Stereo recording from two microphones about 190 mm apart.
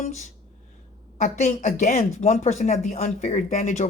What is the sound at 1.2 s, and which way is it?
Speech, 40° left (ahead or behind).